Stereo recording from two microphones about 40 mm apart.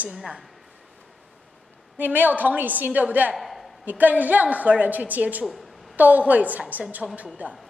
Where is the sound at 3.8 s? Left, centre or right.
Right.